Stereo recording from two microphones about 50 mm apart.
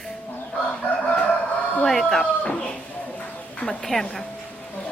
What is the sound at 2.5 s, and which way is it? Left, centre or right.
Speech, left.